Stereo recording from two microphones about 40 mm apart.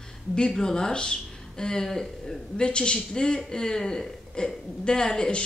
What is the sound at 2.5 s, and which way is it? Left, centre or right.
A man's voice, left.